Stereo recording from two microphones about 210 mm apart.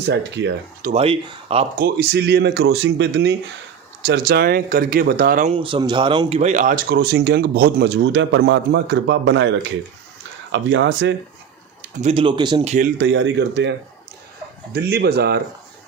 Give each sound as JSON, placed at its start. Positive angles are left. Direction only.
{"t": 0.0, "sound": "speech", "side_deg": -55}
{"t": 0.9, "sound": "speech", "side_deg": -30}
{"t": 1.7, "sound": "speech", "side_deg": -50}
{"t": 5.5, "sound": "speech", "side_deg": -25}
{"t": 11.9, "sound": "speech", "side_deg": -30}
{"t": 13.0, "sound": "speech", "side_deg": -60}